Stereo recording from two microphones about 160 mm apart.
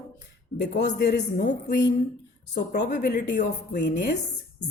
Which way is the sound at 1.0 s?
90° left.